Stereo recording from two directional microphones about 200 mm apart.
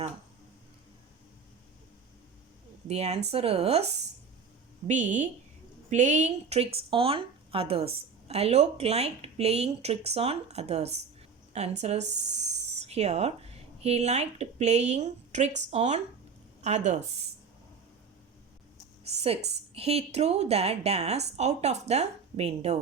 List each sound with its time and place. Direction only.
2.8 s speech: 30° right (ahead or behind)
4.9 s speech: 35° right (ahead or behind)
12.1 s speech: 60° right (ahead or behind)
12.8 s a woman's voice: 35° right (ahead or behind)
19.0 s a woman's voice: 30° right (ahead or behind)